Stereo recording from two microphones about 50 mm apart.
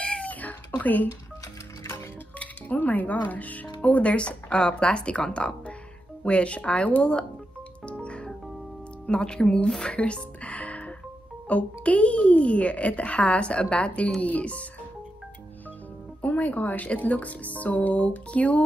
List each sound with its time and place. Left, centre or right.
0.0 s cat: centre
0.3 s cat: left
2.3 s a child's voice: left
7.8 s music: left
9.0 s a child's voice: centre
9.7 s music: centre
11.4 s a child's voice: left
16.2 s speech: left